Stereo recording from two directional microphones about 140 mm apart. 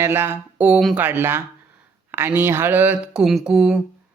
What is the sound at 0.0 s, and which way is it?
Speech, 15° right (ahead or behind).